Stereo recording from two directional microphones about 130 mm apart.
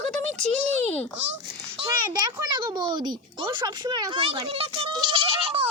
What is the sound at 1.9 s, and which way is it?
Speech, 30° right (ahead or behind).